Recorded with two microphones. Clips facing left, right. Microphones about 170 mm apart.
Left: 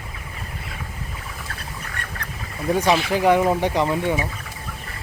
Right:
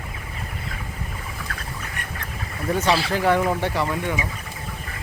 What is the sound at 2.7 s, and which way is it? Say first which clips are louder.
Speech: left 2 dB; 10° left (ahead or behind).